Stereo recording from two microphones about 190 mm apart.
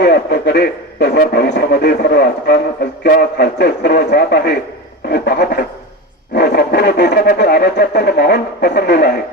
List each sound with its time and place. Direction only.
0.0 s a man's voice: 60° left (ahead or behind)